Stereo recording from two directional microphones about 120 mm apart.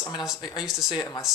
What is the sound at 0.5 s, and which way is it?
Speech, 5° right (ahead or behind).